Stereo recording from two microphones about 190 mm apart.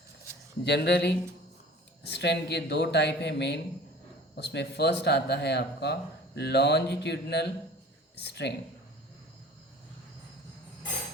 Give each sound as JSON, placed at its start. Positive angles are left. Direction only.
{"t": 0.6, "sound": "speech", "side_deg": 60}